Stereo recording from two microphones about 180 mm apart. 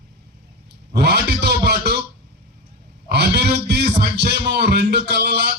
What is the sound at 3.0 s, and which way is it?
A man's voice, 65° right (ahead or behind).